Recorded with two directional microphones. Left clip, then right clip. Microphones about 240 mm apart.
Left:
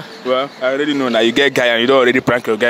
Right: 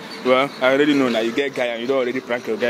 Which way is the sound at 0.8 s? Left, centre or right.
Centre.